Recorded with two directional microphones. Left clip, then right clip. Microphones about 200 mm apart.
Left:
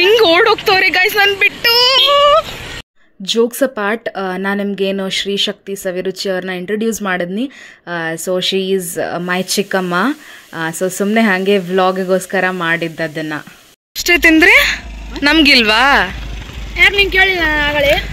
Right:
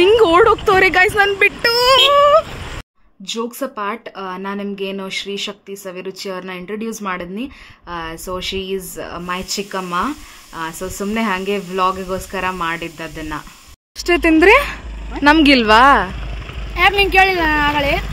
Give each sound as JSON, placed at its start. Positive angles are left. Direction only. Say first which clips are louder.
{"t": 0.0, "sound": "speech", "louder": "left 1 dB", "side_deg": -10}
{"t": 3.3, "sound": "speech", "louder": "left 10 dB", "side_deg": 25}
{"t": 13.9, "sound": "speech", "louder": "left 4 dB", "side_deg": -5}
{"t": 16.7, "sound": "speech", "louder": "left 2 dB", "side_deg": -55}